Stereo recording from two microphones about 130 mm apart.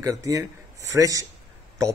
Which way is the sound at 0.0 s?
25° right (ahead or behind).